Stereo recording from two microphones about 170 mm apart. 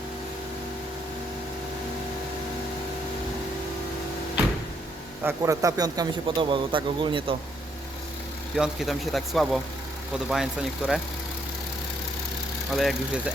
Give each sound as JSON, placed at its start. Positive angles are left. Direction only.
{"t": 5.2, "sound": "a man's voice", "side_deg": -20}
{"t": 8.5, "sound": "speech", "side_deg": 0}
{"t": 12.7, "sound": "speech", "side_deg": 0}